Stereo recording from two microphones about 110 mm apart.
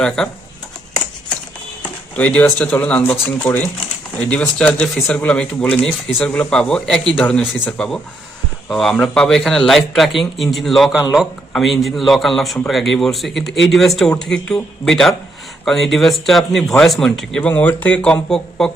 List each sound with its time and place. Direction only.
0.2 s speech: centre (ahead or behind)
1.8 s a man's voice: 10° left (ahead or behind)